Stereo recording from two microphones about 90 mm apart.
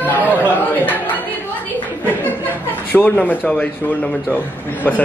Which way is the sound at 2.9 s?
15° left (ahead or behind).